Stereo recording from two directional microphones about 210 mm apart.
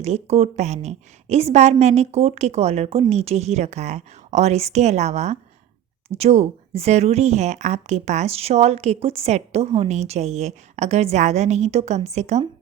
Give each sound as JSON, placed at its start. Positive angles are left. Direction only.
{"t": 0.0, "sound": "speech", "side_deg": -30}